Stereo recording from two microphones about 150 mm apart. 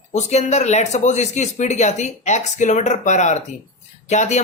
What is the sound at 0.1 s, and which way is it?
Speech, 50° left (ahead or behind).